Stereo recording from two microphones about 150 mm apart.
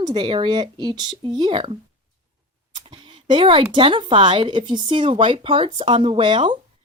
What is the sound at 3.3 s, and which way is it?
Speech, 35° right (ahead or behind).